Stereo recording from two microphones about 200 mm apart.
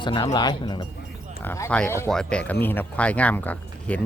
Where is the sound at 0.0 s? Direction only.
25° left (ahead or behind).